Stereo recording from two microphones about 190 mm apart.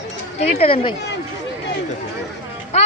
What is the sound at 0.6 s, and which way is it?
Speech, 30° left (ahead or behind).